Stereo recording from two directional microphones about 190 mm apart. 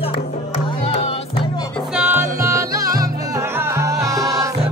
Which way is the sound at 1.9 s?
10° right (ahead or behind).